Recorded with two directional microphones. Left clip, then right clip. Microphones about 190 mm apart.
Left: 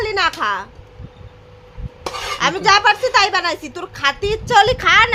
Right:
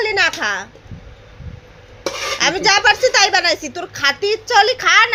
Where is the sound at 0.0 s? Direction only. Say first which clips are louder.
Right 1 dB; 5° left (ahead or behind).